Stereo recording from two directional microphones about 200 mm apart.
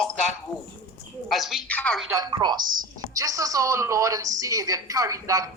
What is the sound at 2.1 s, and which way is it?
A woman's voice, 20° right (ahead or behind).